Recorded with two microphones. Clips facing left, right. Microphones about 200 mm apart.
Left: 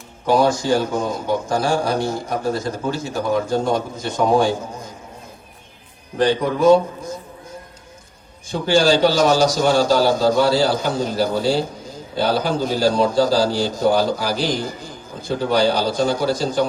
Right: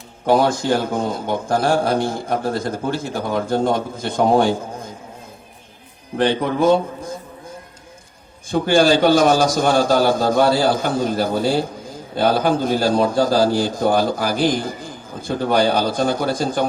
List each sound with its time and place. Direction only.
0.3 s a man's voice: 55° right (ahead or behind)
6.1 s a man's voice: 55° right (ahead or behind)
8.4 s a man's voice: 55° right (ahead or behind)